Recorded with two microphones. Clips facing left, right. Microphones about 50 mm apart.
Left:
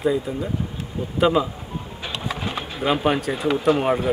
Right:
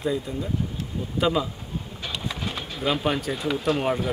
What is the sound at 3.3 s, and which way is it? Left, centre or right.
Speech, centre.